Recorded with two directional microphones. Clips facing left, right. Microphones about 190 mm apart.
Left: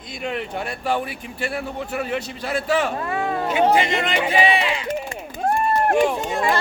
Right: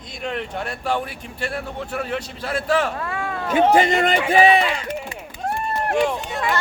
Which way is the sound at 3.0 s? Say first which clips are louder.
Left 3 dB; 20° left (ahead or behind).